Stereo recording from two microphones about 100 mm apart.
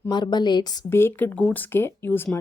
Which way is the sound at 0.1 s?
45° left (ahead or behind).